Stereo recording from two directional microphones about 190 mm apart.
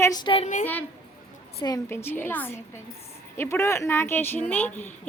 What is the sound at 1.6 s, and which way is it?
A woman's voice, 15° left (ahead or behind).